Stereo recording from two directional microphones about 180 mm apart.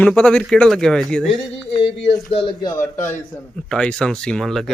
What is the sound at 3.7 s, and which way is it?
Speech, 5° left (ahead or behind).